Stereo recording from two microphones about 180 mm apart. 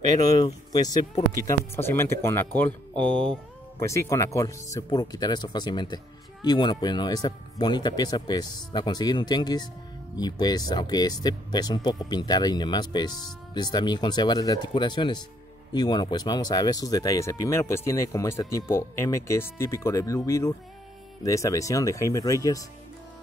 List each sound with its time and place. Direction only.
0.2 s speech: 20° left (ahead or behind)